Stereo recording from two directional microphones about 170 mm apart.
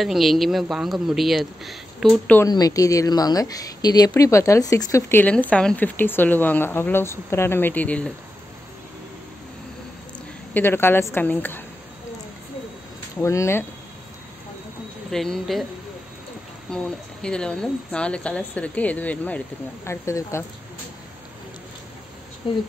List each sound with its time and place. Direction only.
0.0 s speech: centre (ahead or behind)
2.4 s a woman's voice: 20° left (ahead or behind)
10.5 s a woman's voice: 15° left (ahead or behind)
13.2 s a woman's voice: 15° left (ahead or behind)
15.0 s speech: centre (ahead or behind)
16.7 s a woman's voice: 5° left (ahead or behind)